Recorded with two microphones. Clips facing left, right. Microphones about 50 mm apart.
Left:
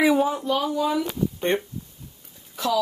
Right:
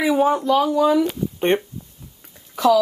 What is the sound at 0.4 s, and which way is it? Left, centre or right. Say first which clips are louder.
Speech: right 7 dB; right.